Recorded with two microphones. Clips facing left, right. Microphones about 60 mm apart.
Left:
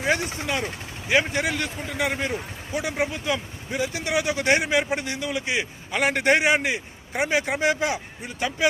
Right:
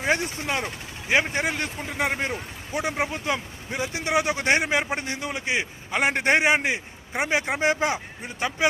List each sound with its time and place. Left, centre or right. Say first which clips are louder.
0.0 s a man's voice: even; right